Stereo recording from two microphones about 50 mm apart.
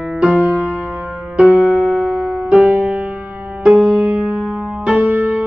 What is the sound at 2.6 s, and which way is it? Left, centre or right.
Music, right.